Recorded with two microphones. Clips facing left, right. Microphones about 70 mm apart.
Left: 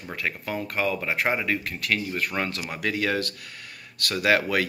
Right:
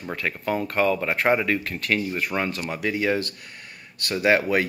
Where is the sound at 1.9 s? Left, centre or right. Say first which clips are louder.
Right 3 dB; centre.